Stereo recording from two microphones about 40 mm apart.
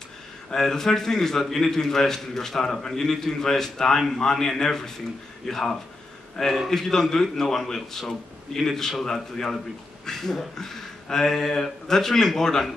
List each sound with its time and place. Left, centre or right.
0.5 s a man's voice: centre